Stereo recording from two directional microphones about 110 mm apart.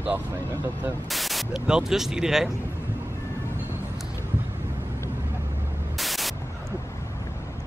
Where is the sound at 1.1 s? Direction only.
Centre (ahead or behind).